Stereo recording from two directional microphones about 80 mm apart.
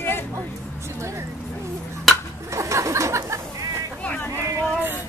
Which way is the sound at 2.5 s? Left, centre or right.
Right.